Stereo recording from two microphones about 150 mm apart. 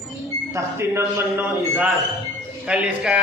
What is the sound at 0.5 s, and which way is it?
Speech, 20° right (ahead or behind).